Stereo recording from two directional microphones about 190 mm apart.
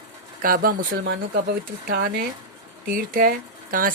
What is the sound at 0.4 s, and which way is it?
Speech, 50° right (ahead or behind).